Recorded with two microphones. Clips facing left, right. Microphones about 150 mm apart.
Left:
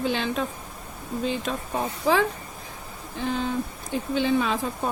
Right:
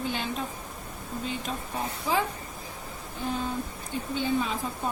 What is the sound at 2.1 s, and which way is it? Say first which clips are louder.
Speech: left 6 dB; 90° left.